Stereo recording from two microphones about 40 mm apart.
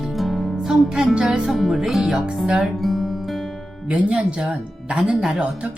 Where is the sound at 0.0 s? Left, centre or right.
Centre.